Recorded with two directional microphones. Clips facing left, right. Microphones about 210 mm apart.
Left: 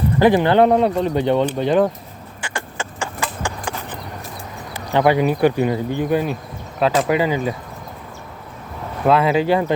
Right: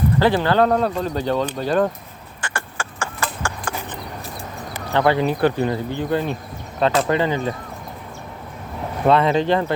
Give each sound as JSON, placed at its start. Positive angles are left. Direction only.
{"t": 0.2, "sound": "speech", "side_deg": 15}
{"t": 2.4, "sound": "horse", "side_deg": 15}
{"t": 4.9, "sound": "speech", "side_deg": 15}
{"t": 9.0, "sound": "speech", "side_deg": 5}